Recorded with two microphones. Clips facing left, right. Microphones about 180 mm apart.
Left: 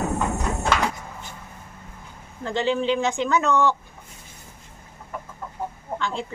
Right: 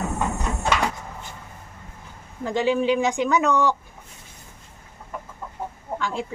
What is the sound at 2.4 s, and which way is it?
Speech, 10° right (ahead or behind).